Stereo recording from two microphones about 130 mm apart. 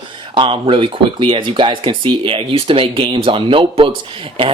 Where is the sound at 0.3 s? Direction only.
40° right (ahead or behind).